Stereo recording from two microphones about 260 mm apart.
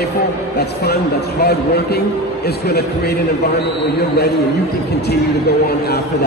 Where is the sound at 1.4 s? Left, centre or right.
Left.